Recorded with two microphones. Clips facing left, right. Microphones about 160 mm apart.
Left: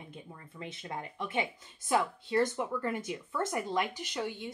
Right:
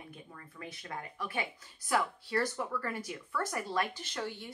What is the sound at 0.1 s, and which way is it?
Speech, 20° left (ahead or behind).